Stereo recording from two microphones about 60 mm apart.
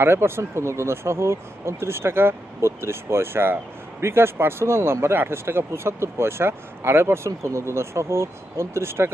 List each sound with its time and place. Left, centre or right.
0.0 s speech: right